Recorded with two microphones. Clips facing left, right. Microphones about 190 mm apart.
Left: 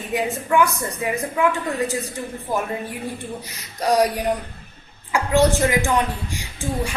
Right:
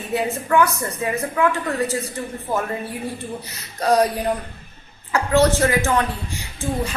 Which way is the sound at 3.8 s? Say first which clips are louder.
Right 1 dB; 15° left (ahead or behind).